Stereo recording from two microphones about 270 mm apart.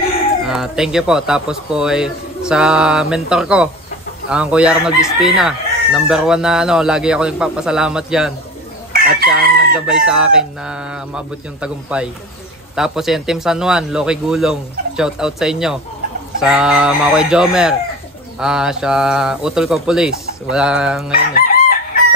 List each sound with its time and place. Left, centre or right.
0.5 s speech: centre
8.9 s chicken: right
9.8 s speech: centre
21.4 s chicken: left